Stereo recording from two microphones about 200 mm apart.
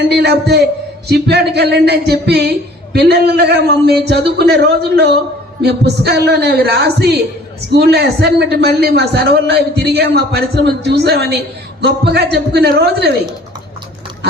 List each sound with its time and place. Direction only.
0.1 s a man's voice: 55° right (ahead or behind)